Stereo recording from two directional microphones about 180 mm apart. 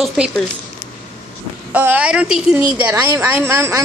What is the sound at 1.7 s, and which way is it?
A woman's voice, 10° right (ahead or behind).